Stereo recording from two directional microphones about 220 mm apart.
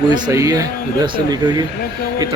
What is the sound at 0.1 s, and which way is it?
A man's voice, 15° right (ahead or behind).